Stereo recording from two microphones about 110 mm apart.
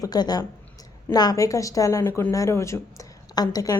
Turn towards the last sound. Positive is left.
turn(degrees=35)  # may be behind; listen again after turning